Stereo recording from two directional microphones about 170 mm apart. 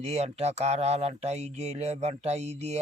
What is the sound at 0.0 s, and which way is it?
A man's voice, 40° right (ahead or behind).